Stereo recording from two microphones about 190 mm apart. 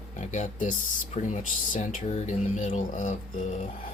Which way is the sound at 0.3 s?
40° left (ahead or behind).